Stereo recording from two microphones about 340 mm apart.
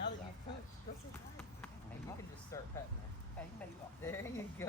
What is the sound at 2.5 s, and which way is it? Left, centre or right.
Speech, centre.